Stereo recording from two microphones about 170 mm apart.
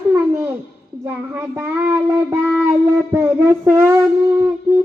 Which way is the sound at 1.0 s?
10° right (ahead or behind).